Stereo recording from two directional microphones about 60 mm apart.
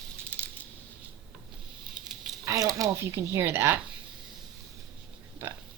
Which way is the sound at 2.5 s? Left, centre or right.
Right.